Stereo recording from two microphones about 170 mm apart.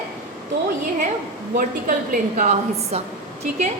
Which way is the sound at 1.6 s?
55° right (ahead or behind).